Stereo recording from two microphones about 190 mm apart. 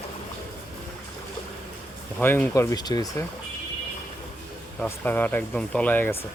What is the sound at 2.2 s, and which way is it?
Speech, 10° left (ahead or behind).